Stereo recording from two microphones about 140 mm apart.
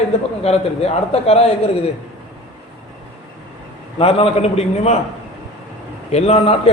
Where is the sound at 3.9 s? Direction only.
45° left (ahead or behind).